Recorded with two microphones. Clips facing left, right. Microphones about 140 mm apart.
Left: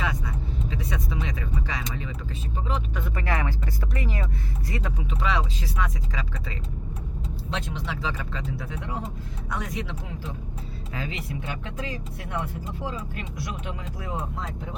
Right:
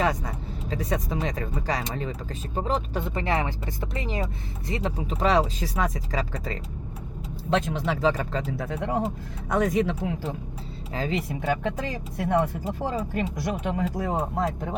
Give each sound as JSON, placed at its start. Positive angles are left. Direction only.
{"t": 0.0, "sound": "vehicle", "side_deg": -40}
{"t": 2.6, "sound": "speech", "side_deg": -40}
{"t": 10.9, "sound": "speech", "side_deg": -35}
{"t": 12.3, "sound": "speech", "side_deg": -50}